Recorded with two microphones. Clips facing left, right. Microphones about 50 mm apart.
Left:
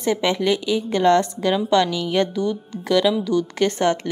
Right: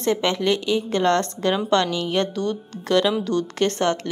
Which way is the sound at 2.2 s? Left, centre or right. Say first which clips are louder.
Left 2 dB; right.